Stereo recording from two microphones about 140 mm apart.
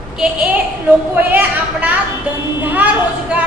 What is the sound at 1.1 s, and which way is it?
A woman's voice, 15° right (ahead or behind).